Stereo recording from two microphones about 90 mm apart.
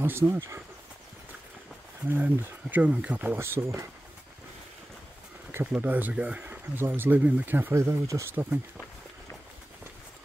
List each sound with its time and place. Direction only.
0.0 s speech: 25° right (ahead or behind)
2.0 s speech: 20° right (ahead or behind)
3.3 s speech: 30° right (ahead or behind)
5.5 s speech: 20° right (ahead or behind)
7.7 s speech: 35° right (ahead or behind)